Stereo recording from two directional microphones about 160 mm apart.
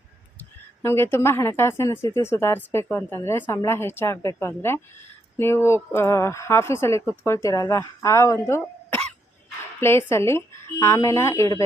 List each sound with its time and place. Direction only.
0.3 s a woman's voice: 15° left (ahead or behind)